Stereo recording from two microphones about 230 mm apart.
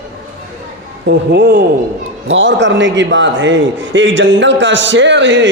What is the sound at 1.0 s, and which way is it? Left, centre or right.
Speech, right.